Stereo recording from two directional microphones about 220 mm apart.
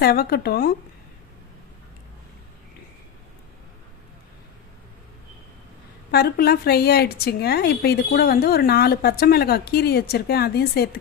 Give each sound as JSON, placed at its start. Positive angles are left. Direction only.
{"t": 0.0, "sound": "a woman's voice", "side_deg": 45}
{"t": 6.1, "sound": "a woman's voice", "side_deg": 45}